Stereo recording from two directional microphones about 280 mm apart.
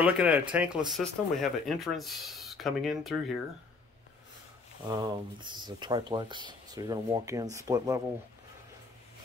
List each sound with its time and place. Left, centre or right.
0.0 s speech: centre
4.8 s speech: centre